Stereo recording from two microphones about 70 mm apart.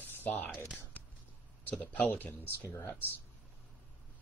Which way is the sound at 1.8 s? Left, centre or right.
Left.